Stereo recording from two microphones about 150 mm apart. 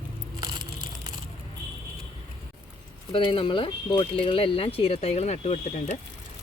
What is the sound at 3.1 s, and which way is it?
Speech, 35° left (ahead or behind).